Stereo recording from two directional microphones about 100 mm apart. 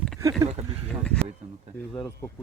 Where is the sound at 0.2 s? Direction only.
30° right (ahead or behind).